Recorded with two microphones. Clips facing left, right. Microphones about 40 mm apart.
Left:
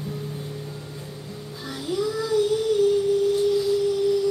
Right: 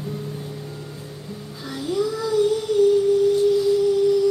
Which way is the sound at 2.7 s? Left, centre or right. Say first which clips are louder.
Right 3 dB; centre.